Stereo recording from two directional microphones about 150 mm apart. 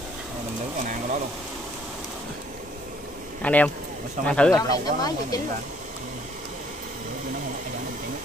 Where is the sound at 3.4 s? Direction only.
10° left (ahead or behind).